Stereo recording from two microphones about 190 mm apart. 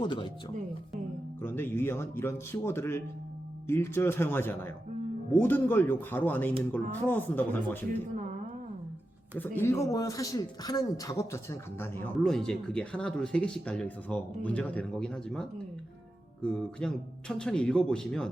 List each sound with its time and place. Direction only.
0.0 s speech: 25° left (ahead or behind)
1.4 s speech: 10° left (ahead or behind)
9.6 s speech: 15° left (ahead or behind)
12.1 s speech: centre (ahead or behind)